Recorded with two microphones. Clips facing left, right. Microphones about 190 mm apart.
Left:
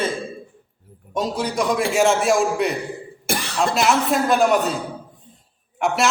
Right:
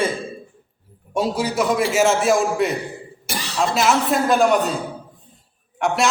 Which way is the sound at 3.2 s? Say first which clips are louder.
Left 5 dB; 55° left (ahead or behind).